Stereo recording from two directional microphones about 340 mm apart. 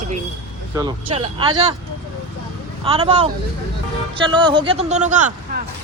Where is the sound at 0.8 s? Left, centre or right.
Centre.